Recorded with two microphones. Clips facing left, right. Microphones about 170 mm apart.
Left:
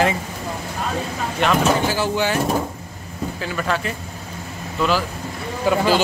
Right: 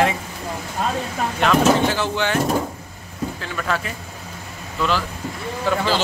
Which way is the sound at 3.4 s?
5° left (ahead or behind).